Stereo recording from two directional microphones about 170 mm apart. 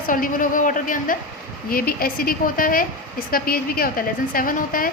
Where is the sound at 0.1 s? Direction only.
55° left (ahead or behind).